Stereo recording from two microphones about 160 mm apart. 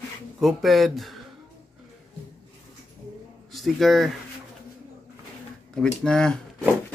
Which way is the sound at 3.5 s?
Centre (ahead or behind).